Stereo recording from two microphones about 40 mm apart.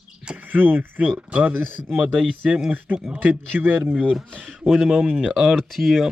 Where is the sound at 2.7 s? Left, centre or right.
Right.